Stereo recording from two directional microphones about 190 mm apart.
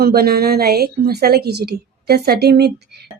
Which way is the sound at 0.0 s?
55° right (ahead or behind).